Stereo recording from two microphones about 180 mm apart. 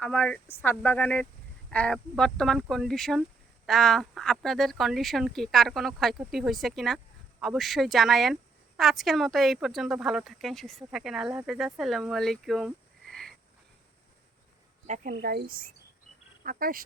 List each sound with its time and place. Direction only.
0.0 s a woman's voice: 5° left (ahead or behind)
14.8 s speech: 45° right (ahead or behind)